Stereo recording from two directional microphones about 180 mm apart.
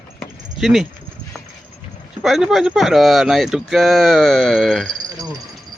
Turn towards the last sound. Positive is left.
turn(degrees=0)  # may be behind; listen again after turning